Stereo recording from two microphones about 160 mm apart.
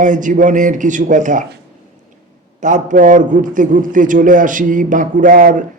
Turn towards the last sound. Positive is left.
turn(degrees=-55)  # may be behind; listen again after turning